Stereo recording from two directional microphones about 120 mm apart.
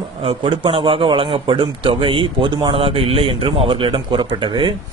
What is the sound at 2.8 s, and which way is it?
Speech, 50° right (ahead or behind).